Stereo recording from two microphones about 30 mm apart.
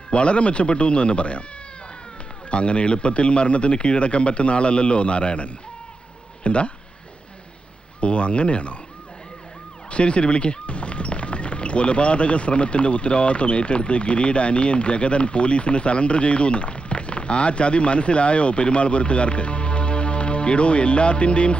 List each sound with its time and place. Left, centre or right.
0.1 s speech: left
2.5 s speech: left
8.0 s speech: left
9.9 s speech: left